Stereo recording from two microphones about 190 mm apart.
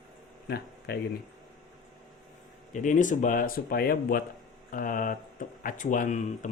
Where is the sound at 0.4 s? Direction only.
60° left (ahead or behind).